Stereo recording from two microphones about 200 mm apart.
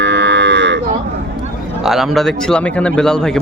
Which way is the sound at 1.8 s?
Centre (ahead or behind).